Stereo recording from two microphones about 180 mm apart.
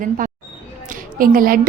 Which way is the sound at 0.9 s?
50° right (ahead or behind).